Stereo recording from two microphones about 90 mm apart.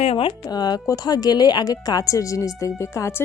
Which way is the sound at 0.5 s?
50° left (ahead or behind).